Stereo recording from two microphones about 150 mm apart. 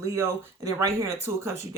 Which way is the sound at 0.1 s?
20° right (ahead or behind).